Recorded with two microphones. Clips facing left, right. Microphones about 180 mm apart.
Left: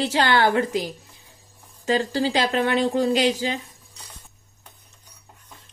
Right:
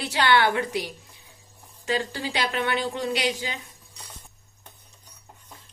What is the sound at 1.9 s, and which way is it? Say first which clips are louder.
Speech: left 6 dB; 35° left (ahead or behind).